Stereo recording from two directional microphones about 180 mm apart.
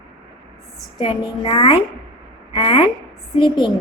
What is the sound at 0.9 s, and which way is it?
A woman's voice, 30° left (ahead or behind).